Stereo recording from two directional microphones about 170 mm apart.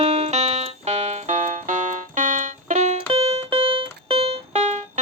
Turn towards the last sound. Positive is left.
turn(degrees=-40)  # may be behind; listen again after turning